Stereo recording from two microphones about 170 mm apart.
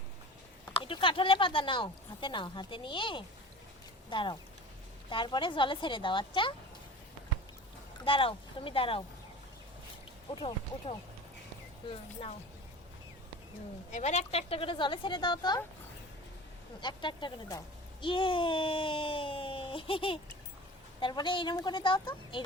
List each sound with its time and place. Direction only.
0.7 s speech: 30° left (ahead or behind)
8.0 s speech: 30° left (ahead or behind)
10.3 s speech: 30° left (ahead or behind)
13.9 s speech: 40° left (ahead or behind); by 15.6 s 25° left (ahead or behind)
16.8 s speech: 25° left (ahead or behind)